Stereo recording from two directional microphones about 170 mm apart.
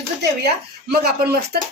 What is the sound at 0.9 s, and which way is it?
Speech, 65° right (ahead or behind).